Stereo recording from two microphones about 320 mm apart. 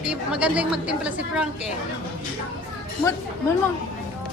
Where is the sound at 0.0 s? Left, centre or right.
Centre.